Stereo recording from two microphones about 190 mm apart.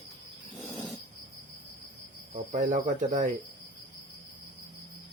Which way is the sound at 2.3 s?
40° right (ahead or behind).